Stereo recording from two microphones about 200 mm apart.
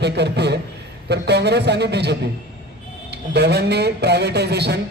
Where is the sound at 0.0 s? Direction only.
55° right (ahead or behind).